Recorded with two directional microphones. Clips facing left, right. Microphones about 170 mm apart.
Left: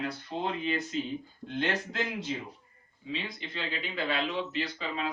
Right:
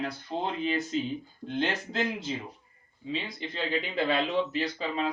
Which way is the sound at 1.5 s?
30° right (ahead or behind).